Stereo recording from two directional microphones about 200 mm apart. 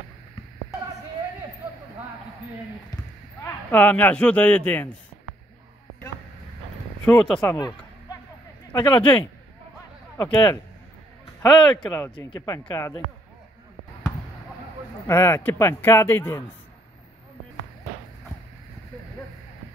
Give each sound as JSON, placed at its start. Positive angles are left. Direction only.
{"t": 3.4, "sound": "a man's voice", "side_deg": 10}
{"t": 7.1, "sound": "speech", "side_deg": 5}
{"t": 7.5, "sound": "a sound", "side_deg": 20}
{"t": 8.7, "sound": "a man's voice", "side_deg": 10}
{"t": 11.7, "sound": "a man's voice", "side_deg": 5}
{"t": 15.0, "sound": "a man's voice", "side_deg": 10}